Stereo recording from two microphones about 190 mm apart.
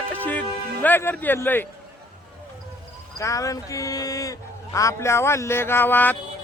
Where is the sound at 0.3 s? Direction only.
10° left (ahead or behind).